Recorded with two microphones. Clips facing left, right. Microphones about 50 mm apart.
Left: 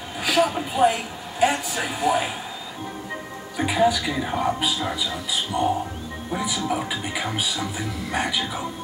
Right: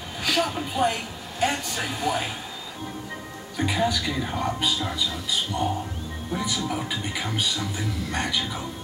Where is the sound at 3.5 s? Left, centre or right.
Centre.